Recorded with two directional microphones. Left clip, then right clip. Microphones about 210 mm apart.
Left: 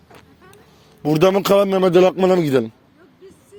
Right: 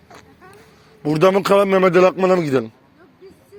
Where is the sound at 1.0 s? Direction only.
60° left (ahead or behind).